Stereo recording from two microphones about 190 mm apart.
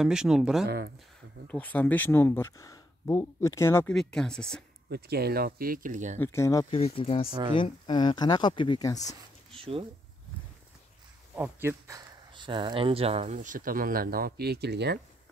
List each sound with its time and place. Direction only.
0.0 s speech: 5° right (ahead or behind)
0.7 s speech: 60° right (ahead or behind)
1.5 s speech: 10° left (ahead or behind)
3.9 s speech: centre (ahead or behind)
4.8 s speech: 60° right (ahead or behind); by 6.1 s 40° right (ahead or behind)
6.1 s speech: 15° left (ahead or behind)
6.7 s speech: 30° left (ahead or behind)
7.2 s speech: 20° right (ahead or behind)
7.5 s speech: 25° left (ahead or behind)
9.5 s speech: 30° right (ahead or behind)
11.3 s speech: 10° right (ahead or behind)
12.4 s speech: 25° right (ahead or behind); by 15.0 s 60° right (ahead or behind)